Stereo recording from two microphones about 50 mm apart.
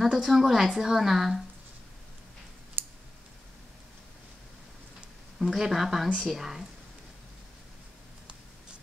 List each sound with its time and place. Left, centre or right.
0.0 s a woman's voice: centre
2.8 s clicking: right
5.5 s a woman's voice: centre